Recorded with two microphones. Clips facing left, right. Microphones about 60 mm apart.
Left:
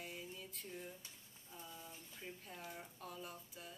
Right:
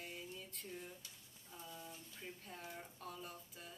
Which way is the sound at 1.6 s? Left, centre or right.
Centre.